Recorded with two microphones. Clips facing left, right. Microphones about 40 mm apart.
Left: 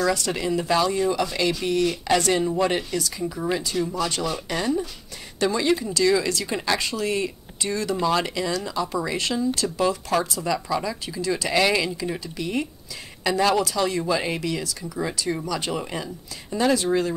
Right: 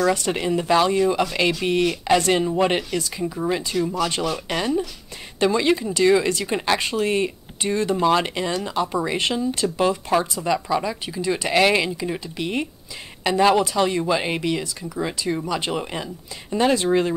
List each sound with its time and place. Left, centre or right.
0.0 s speech: right
2.0 s speech: right
3.2 s speech: right
4.2 s speech: right
14.9 s speech: centre
15.4 s speech: right